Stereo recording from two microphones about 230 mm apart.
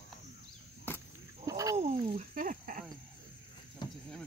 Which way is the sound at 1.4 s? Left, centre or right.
Centre.